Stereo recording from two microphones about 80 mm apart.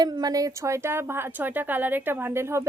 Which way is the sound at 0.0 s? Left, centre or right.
Right.